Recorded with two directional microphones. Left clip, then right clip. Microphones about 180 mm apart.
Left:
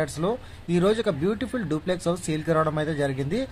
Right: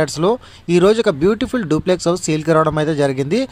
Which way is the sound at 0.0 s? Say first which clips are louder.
Right 10 dB; 40° right (ahead or behind).